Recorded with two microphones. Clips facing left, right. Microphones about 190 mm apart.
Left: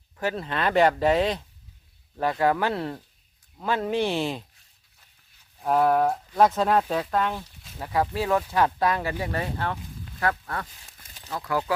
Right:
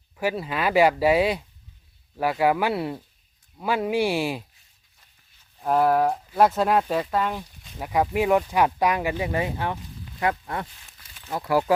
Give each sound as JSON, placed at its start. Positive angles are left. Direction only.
{"t": 0.2, "sound": "speech", "side_deg": -10}
{"t": 5.5, "sound": "speech", "side_deg": 0}